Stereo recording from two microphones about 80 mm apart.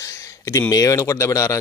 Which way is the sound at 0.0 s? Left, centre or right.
Left.